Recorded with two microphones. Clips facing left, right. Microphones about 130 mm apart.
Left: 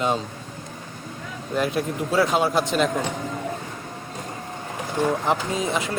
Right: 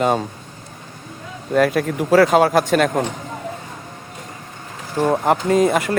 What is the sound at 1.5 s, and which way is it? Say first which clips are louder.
Speech: right 7 dB; 65° right (ahead or behind).